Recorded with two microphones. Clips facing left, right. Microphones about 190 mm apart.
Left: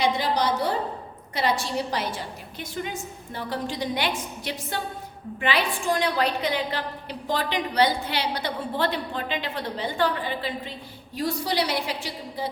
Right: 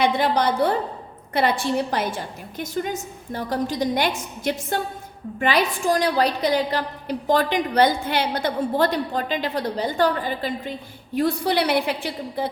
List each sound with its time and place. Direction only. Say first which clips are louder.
0.0 s a woman's voice: right 4 dB; 55° right (ahead or behind)